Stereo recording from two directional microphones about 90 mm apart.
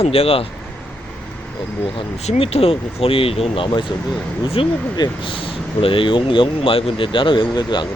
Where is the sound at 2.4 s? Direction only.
90° left; by 3.9 s 65° left (ahead or behind).